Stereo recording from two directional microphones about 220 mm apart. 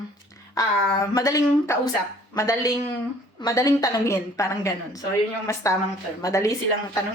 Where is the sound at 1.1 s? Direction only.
15° left (ahead or behind).